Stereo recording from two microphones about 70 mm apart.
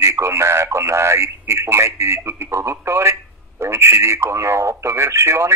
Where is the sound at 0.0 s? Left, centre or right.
Right.